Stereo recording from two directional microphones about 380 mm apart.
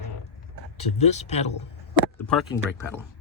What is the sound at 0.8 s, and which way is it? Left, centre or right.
Speech, centre.